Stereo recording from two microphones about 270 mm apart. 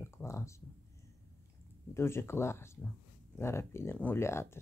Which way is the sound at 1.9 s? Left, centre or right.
Centre.